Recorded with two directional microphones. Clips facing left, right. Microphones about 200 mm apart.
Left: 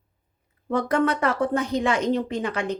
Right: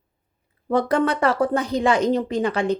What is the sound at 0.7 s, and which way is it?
A woman's voice, 30° right (ahead or behind).